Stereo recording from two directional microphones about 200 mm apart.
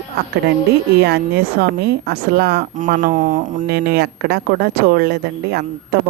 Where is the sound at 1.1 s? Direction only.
55° right (ahead or behind).